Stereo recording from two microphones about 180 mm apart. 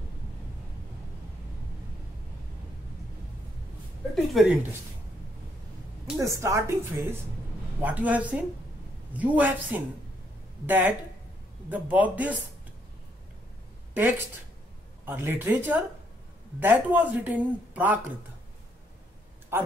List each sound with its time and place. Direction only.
4.1 s speech: centre (ahead or behind)
6.1 s speech: 15° right (ahead or behind)
13.9 s speech: 10° right (ahead or behind)